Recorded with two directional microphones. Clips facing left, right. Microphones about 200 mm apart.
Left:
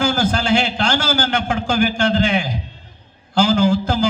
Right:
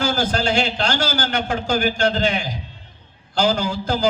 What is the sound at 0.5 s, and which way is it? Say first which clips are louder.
A man's voice: left 3 dB; 50° left (ahead or behind).